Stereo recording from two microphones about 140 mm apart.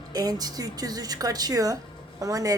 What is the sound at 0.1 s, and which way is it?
A woman's voice, 25° right (ahead or behind).